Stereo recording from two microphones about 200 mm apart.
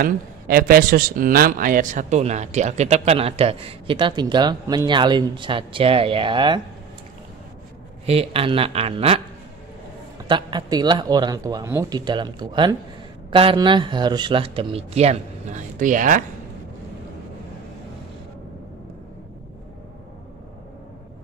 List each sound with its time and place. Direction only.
0.0 s a man's voice: 45° right (ahead or behind); by 6.6 s 25° right (ahead or behind)
8.1 s a man's voice: 30° right (ahead or behind)
10.2 s a man's voice: 25° right (ahead or behind); by 16.3 s 40° right (ahead or behind)